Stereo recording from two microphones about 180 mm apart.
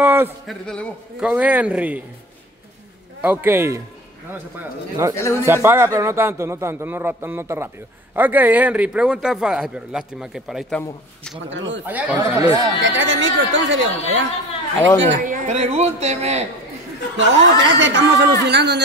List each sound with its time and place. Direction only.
0.0 s a sound: 10° right (ahead or behind)
0.5 s a man's voice: 5° left (ahead or behind)
1.2 s speech: 10° right (ahead or behind)
3.2 s speech: 10° right (ahead or behind)
5.1 s speech: 15° left (ahead or behind)
5.4 s speech: 10° right (ahead or behind)
11.4 s speech: 90° right
11.8 s speech: 10° right (ahead or behind)
12.8 s speech: 90° right
15.2 s speech: 45° right (ahead or behind)
17.2 s a man's voice: 90° right; by 18.8 s 70° right (ahead or behind)